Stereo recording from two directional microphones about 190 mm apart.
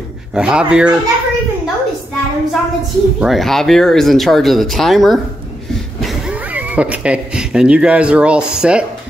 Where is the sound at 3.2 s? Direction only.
Centre (ahead or behind).